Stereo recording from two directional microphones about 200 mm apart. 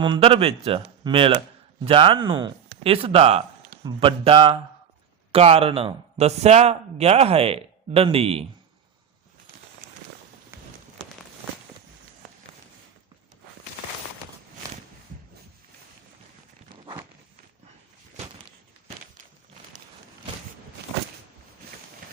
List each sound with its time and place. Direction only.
0.0 s a man's voice: 25° right (ahead or behind)